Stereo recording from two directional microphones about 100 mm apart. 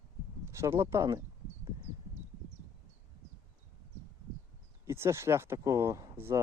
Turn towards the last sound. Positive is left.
turn(degrees=-25)  # may be behind; listen again after turning